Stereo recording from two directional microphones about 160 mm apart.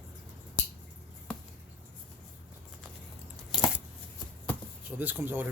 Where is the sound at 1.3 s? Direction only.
5° left (ahead or behind).